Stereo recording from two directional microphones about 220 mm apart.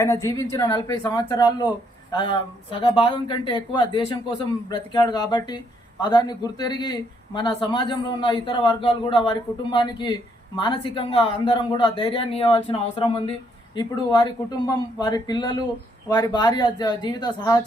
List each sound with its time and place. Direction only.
0.0 s speech: 15° left (ahead or behind)